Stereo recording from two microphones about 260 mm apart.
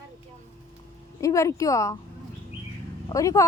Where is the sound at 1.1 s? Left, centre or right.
Centre.